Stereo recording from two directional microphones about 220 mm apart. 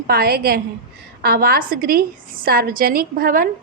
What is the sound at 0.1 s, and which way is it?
A woman's voice, 45° right (ahead or behind).